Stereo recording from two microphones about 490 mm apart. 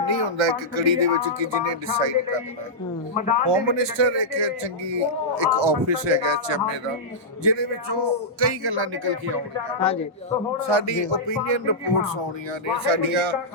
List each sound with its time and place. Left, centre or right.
0.0 s a man's voice: right
3.4 s a man's voice: right
10.7 s a man's voice: right